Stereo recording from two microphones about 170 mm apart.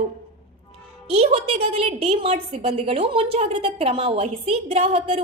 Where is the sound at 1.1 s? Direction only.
35° right (ahead or behind).